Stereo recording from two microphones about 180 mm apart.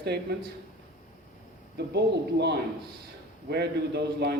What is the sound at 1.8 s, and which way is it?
A man's voice, 70° right (ahead or behind).